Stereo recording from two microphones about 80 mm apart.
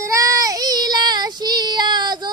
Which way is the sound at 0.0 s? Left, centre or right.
Right.